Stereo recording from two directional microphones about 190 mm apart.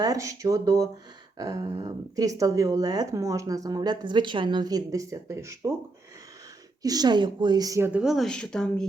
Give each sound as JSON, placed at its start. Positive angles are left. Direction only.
{"t": 0.0, "sound": "a woman's voice", "side_deg": -20}
{"t": 6.8, "sound": "a woman's voice", "side_deg": -20}